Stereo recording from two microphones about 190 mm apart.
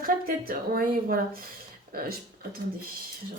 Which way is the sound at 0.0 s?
50° right (ahead or behind).